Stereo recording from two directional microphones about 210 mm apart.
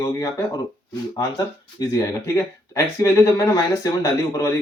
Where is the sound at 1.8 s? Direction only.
15° left (ahead or behind).